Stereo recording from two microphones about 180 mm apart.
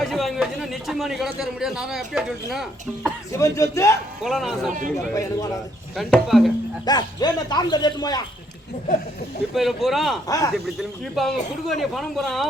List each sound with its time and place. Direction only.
0.0 s a man's voice: centre (ahead or behind)
3.3 s speech: 15° left (ahead or behind)
4.2 s a man's voice: centre (ahead or behind)
6.0 s a man's voice: centre (ahead or behind)
6.8 s a man's voice: 20° left (ahead or behind)
9.6 s a man's voice: centre (ahead or behind)
10.2 s a man's voice: 20° left (ahead or behind)
10.5 s a man's voice: centre (ahead or behind)